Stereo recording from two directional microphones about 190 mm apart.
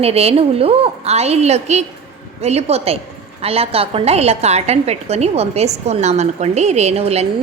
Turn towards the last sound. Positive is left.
turn(degrees=-35)  # may be behind; listen again after turning